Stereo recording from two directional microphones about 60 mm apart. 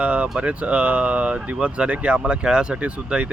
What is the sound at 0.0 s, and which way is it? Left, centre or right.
Speech, right.